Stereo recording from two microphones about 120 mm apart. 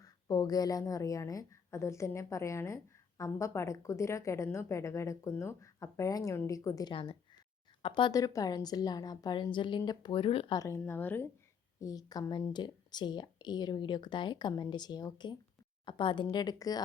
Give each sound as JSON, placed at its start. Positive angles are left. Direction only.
{"t": 0.0, "sound": "a woman's voice", "side_deg": 30}
{"t": 6.9, "sound": "a woman's voice", "side_deg": 50}
{"t": 8.1, "sound": "speech", "side_deg": 30}
{"t": 10.5, "sound": "a woman's voice", "side_deg": 25}
{"t": 10.8, "sound": "a woman's voice", "side_deg": 15}
{"t": 11.8, "sound": "speech", "side_deg": 30}